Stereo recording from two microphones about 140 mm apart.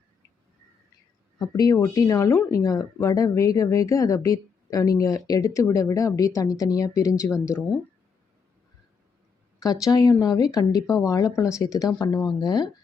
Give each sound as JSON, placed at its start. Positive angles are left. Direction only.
{"t": 1.4, "sound": "speech", "side_deg": 25}
{"t": 9.8, "sound": "speech", "side_deg": 25}